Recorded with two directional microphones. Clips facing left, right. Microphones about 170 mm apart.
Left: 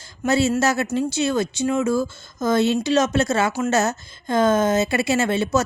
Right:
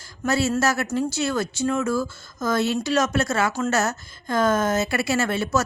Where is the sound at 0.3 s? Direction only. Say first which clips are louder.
Left 3 dB; 20° left (ahead or behind).